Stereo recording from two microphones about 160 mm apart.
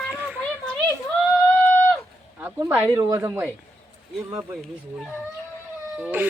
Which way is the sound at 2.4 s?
10° right (ahead or behind).